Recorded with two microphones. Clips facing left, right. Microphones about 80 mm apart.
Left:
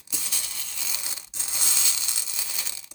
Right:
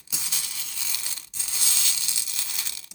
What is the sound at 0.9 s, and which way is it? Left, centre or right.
Crushing, centre.